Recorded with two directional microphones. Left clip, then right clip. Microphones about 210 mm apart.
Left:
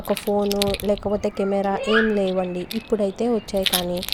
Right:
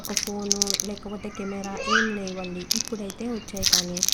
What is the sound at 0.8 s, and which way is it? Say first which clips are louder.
A child's voice: left 11 dB; 35° left (ahead or behind).